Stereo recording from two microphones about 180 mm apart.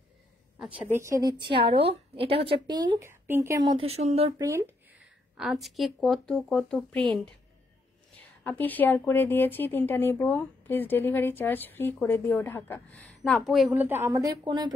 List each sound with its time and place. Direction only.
0.6 s a woman's voice: 5° right (ahead or behind); by 3.0 s 25° right (ahead or behind)
3.0 s speech: 15° right (ahead or behind)
3.6 s speech: 30° right (ahead or behind)
4.4 s speech: 15° right (ahead or behind)
5.4 s a woman's voice: centre (ahead or behind); by 14.7 s 25° right (ahead or behind)